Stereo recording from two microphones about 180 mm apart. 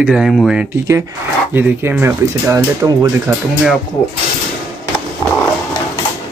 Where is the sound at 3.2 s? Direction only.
5° right (ahead or behind).